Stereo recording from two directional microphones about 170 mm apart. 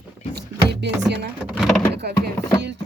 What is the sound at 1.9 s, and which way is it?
Speech, 75° right (ahead or behind).